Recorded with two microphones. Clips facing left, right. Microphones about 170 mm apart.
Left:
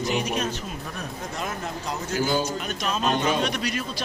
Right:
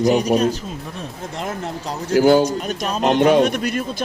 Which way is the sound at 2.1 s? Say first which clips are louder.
Right 12 dB; 70° right (ahead or behind).